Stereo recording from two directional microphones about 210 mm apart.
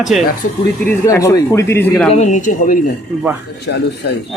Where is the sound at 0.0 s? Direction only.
Centre (ahead or behind).